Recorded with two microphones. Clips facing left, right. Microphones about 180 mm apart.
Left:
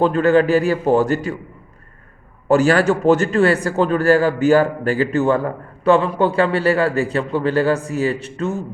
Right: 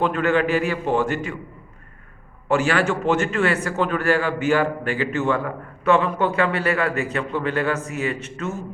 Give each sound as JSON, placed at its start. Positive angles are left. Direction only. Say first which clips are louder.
{"t": 0.0, "sound": "a man's voice", "louder": "left 6 dB", "side_deg": 35}
{"t": 2.5, "sound": "a man's voice", "louder": "left 6 dB", "side_deg": 40}